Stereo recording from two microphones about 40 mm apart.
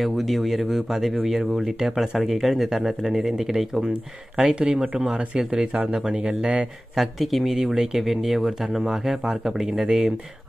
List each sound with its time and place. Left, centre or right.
0.0 s speech: centre
4.5 s speech: right
5.7 s speech: right
7.0 s speech: centre
7.5 s speech: centre